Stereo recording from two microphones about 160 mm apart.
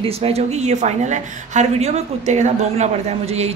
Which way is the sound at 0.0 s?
40° right (ahead or behind).